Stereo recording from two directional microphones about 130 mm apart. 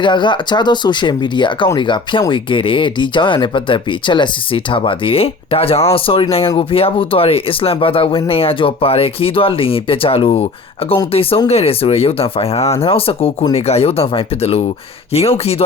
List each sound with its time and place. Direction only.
0.0 s speech: 35° left (ahead or behind)